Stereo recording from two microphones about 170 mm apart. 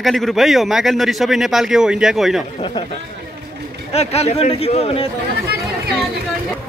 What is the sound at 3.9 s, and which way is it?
Speech, 40° left (ahead or behind).